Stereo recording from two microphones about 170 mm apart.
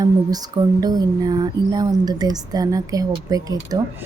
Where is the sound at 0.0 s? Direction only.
20° right (ahead or behind).